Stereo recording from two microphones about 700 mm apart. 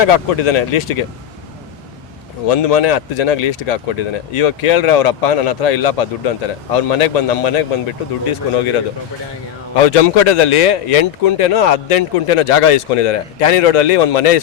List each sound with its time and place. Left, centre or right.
0.0 s speech: left
2.5 s a man's voice: left
9.8 s a man's voice: left